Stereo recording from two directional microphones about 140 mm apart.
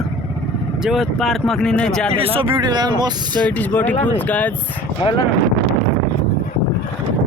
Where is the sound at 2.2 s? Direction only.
40° right (ahead or behind).